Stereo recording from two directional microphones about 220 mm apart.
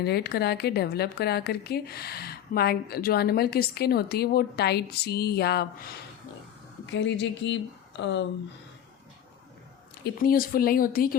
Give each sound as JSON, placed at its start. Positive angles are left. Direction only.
{"t": 0.0, "sound": "a woman's voice", "side_deg": 45}
{"t": 10.0, "sound": "speech", "side_deg": 40}